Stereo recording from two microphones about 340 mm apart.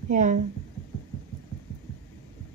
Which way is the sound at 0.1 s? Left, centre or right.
Right.